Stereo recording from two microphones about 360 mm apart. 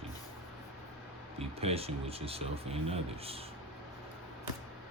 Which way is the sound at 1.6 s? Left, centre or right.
Centre.